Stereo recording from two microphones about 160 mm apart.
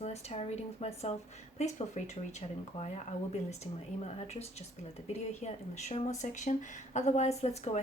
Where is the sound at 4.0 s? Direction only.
40° left (ahead or behind).